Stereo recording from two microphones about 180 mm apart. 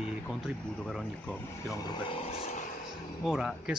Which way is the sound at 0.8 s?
5° left (ahead or behind).